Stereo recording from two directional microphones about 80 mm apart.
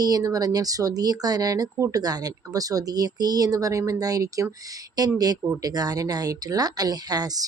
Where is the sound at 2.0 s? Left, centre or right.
Right.